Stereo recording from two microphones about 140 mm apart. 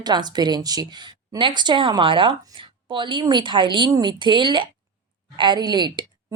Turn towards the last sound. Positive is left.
turn(degrees=-30)  # may be behind; listen again after turning